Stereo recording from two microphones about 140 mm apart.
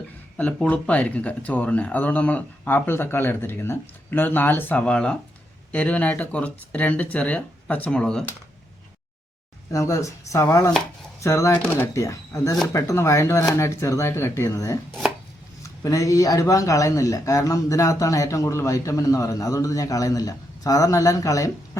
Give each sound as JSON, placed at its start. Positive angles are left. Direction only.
{"t": 0.3, "sound": "speech", "side_deg": 10}
{"t": 9.7, "sound": "speech", "side_deg": 20}